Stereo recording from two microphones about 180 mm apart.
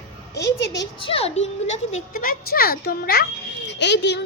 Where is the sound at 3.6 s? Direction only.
75° left (ahead or behind).